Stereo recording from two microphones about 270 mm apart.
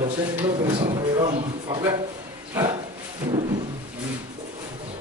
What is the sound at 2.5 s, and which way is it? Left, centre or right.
Dog, centre.